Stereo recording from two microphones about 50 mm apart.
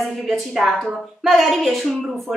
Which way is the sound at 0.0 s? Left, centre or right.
Centre.